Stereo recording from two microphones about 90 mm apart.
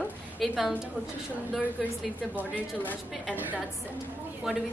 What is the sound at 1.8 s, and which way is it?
Speech, 5° right (ahead or behind).